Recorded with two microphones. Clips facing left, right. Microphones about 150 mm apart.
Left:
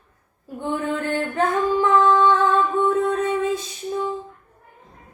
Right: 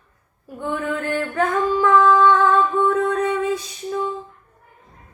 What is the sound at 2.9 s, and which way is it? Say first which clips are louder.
Music: right 1 dB; 25° left (ahead or behind).